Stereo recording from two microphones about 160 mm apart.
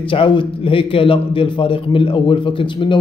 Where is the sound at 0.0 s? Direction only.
30° left (ahead or behind).